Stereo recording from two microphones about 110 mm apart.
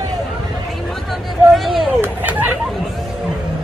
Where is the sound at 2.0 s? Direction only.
15° right (ahead or behind).